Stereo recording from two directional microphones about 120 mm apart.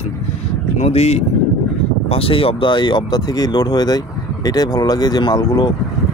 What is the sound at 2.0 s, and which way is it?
Speech, 50° left (ahead or behind).